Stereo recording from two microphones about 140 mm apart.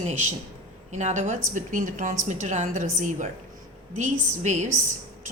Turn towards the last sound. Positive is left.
turn(degrees=-60)  # may be behind; listen again after turning